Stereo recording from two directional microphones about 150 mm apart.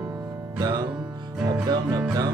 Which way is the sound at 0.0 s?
20° right (ahead or behind).